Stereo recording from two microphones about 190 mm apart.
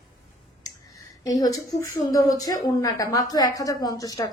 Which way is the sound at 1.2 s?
20° left (ahead or behind).